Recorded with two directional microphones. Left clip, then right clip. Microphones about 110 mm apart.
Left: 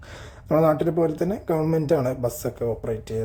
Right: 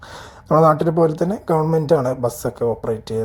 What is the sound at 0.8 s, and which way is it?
Speech, 5° right (ahead or behind).